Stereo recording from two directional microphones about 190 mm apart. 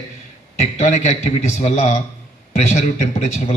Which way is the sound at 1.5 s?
35° left (ahead or behind).